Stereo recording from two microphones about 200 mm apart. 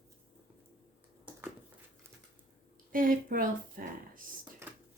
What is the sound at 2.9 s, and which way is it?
A woman's voice, 45° right (ahead or behind).